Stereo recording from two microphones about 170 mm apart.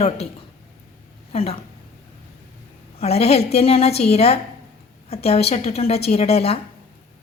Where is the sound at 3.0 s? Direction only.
40° left (ahead or behind).